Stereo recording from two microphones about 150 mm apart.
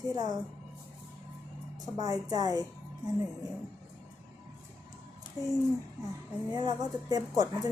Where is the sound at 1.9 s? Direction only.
25° right (ahead or behind).